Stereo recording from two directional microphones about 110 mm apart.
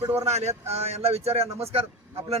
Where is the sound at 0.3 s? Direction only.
90° right.